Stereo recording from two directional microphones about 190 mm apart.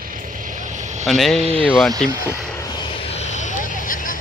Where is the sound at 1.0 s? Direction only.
Centre (ahead or behind).